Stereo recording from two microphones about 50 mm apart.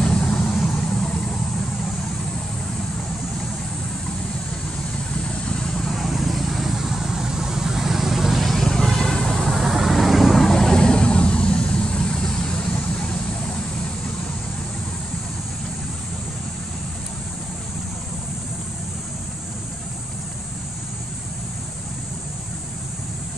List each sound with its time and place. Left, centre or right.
0.0 s vehicle: centre
5.9 s vehicle: centre